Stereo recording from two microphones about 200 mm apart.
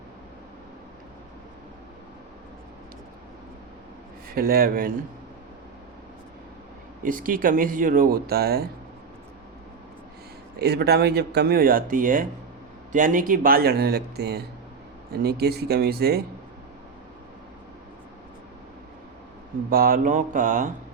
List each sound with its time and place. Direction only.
4.3 s speech: 50° right (ahead or behind)
7.0 s speech: 45° right (ahead or behind)
10.6 s speech: 55° right (ahead or behind)
19.7 s speech: 45° right (ahead or behind)